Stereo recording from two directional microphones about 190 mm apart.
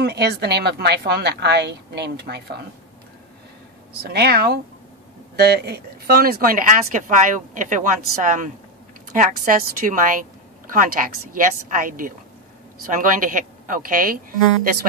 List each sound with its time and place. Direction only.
0.0 s a woman's voice: 60° right (ahead or behind)
4.0 s a woman's voice: 55° right (ahead or behind)